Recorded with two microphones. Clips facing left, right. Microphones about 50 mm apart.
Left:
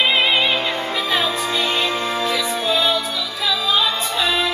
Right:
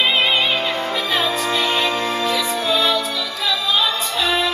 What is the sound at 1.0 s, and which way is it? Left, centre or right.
Music, centre.